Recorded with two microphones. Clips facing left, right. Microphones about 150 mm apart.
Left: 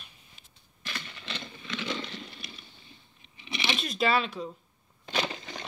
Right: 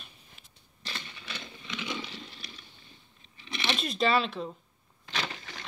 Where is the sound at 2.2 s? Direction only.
Centre (ahead or behind).